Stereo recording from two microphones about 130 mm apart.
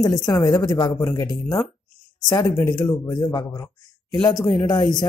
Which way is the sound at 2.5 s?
15° left (ahead or behind).